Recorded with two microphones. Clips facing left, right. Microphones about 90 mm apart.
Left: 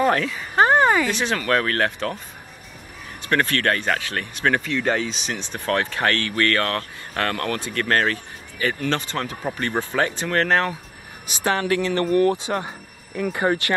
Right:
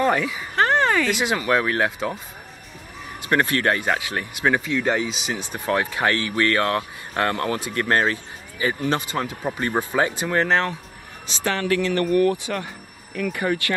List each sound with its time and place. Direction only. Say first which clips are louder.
0.0 s speech: left 1 dB; 5° right (ahead or behind)
0.6 s a sound: left 3 dB; 15° left (ahead or behind)
1.1 s speech: right 1 dB; 15° right (ahead or behind)
3.3 s speech: right 1 dB; 15° right (ahead or behind); by 10.8 s centre (ahead or behind)
11.4 s speech: left 1 dB; 25° left (ahead or behind)